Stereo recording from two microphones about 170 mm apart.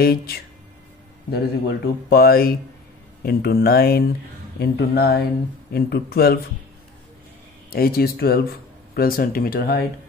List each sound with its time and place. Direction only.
0.0 s a man's voice: 65° left (ahead or behind)
7.7 s a man's voice: 60° left (ahead or behind)